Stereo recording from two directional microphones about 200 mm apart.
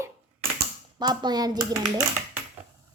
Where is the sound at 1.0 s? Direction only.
20° right (ahead or behind).